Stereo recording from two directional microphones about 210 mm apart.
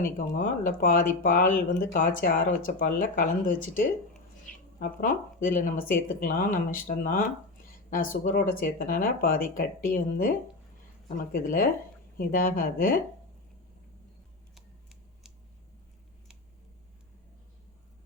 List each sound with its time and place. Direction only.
0.2 s speech: 40° left (ahead or behind)